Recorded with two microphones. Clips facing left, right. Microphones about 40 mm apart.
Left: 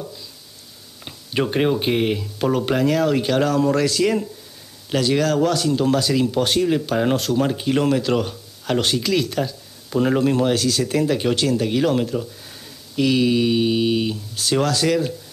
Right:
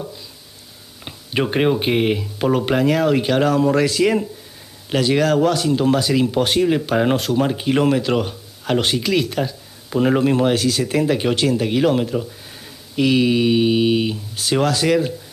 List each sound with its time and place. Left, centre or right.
1.0 s speech: centre